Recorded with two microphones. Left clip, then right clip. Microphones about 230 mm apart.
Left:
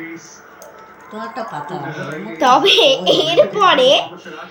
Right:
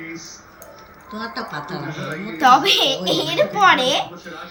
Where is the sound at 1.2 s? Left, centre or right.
Right.